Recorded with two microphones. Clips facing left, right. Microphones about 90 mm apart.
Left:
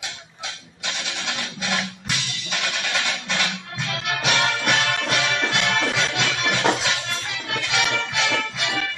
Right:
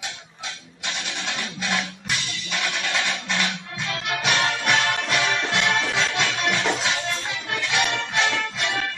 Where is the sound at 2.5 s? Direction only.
60° left (ahead or behind).